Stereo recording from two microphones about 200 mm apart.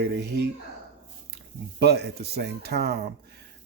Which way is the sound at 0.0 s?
55° right (ahead or behind).